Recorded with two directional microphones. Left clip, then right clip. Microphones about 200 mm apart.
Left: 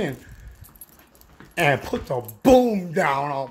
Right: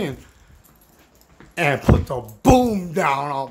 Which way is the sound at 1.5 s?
5° right (ahead or behind).